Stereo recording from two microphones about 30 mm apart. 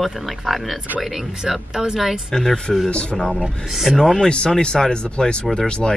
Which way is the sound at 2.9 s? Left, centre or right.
Left.